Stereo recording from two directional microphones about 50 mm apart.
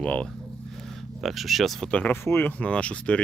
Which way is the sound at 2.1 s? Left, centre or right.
Left.